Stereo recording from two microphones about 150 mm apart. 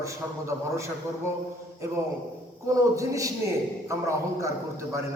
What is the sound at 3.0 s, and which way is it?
A man's voice, 20° right (ahead or behind).